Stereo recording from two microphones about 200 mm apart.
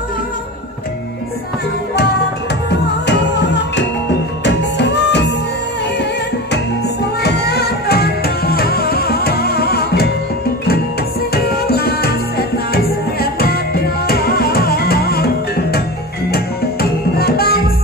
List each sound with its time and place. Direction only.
2.7 s music: 60° left (ahead or behind)
7.2 s music: 55° left (ahead or behind)
11.3 s music: 50° left (ahead or behind)
17.2 s music: 50° left (ahead or behind)